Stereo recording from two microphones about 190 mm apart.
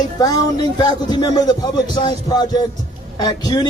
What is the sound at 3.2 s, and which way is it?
Speech, 20° left (ahead or behind).